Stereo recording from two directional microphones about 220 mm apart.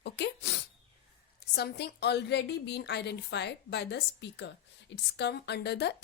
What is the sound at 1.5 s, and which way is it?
A woman's voice, 50° left (ahead or behind).